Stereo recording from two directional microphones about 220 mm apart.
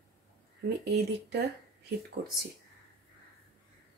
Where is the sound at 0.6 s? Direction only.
45° right (ahead or behind).